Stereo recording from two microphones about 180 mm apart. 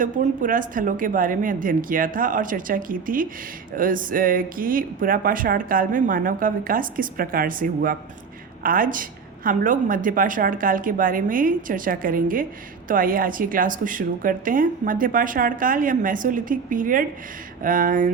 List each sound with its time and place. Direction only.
0.0 s speech: 50° right (ahead or behind)